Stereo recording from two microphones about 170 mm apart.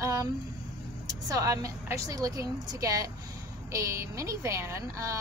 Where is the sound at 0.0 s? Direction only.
20° right (ahead or behind).